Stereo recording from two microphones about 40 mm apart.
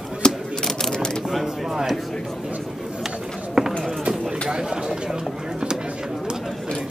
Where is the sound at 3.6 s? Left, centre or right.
Centre.